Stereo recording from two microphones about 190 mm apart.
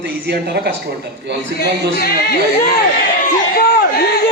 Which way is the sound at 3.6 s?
50° left (ahead or behind).